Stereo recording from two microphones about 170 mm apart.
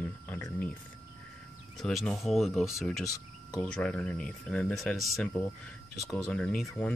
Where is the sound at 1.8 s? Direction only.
5° left (ahead or behind).